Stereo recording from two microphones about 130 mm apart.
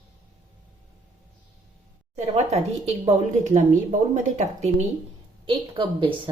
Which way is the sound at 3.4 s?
75° right (ahead or behind).